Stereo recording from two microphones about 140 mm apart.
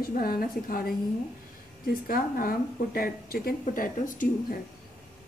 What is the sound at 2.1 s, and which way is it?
A woman's voice, 90° left.